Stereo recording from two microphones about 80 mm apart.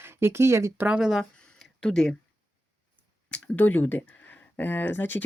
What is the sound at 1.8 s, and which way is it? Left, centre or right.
Speech, centre.